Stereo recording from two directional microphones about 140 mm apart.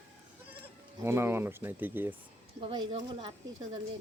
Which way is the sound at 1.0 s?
20° right (ahead or behind).